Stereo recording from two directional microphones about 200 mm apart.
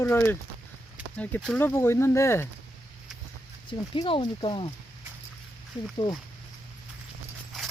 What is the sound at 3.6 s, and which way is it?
Speech, 25° left (ahead or behind).